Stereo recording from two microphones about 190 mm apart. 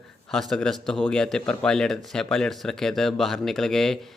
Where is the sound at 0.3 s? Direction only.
Centre (ahead or behind).